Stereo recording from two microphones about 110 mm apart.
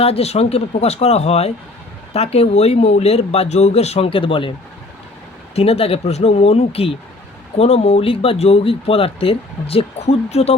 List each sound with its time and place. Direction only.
0.0 s speech: 70° left (ahead or behind); by 4.5 s 55° left (ahead or behind)
5.5 s speech: 65° left (ahead or behind)